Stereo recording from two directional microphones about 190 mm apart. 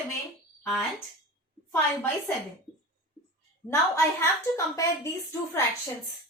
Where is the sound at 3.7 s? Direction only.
15° left (ahead or behind).